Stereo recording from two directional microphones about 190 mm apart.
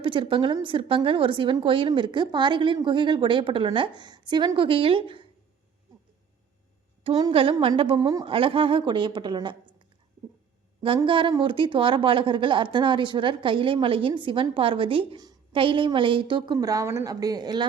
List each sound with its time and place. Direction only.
0.0 s a woman's voice: 25° right (ahead or behind)
7.0 s a woman's voice: 30° right (ahead or behind)
10.8 s a woman's voice: 25° right (ahead or behind)